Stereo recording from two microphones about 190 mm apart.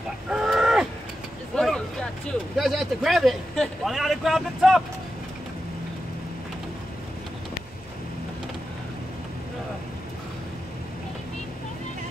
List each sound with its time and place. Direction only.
0.3 s livestock: 5° right (ahead or behind)
1.5 s vehicle: centre (ahead or behind)
2.5 s a man's voice: centre (ahead or behind)